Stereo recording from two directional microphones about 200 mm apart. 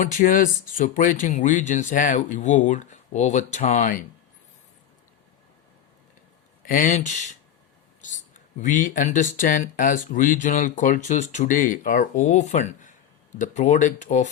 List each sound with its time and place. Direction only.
0.0 s speech: 40° left (ahead or behind)
6.7 s speech: 40° left (ahead or behind)